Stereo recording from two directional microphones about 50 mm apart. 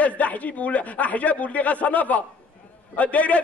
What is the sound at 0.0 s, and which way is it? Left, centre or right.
A man's voice, left.